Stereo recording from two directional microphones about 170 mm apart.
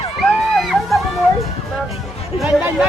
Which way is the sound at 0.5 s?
Centre (ahead or behind).